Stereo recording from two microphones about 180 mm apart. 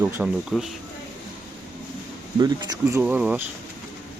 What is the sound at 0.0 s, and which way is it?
Speech, 10° right (ahead or behind).